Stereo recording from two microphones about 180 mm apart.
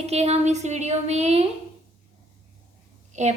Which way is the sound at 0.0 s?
35° right (ahead or behind).